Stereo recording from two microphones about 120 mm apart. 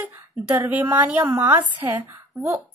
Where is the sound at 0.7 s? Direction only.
15° right (ahead or behind).